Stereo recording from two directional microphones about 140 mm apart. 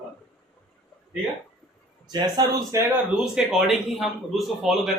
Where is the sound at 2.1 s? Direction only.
25° right (ahead or behind).